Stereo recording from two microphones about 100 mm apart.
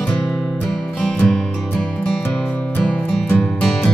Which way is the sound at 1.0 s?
10° left (ahead or behind).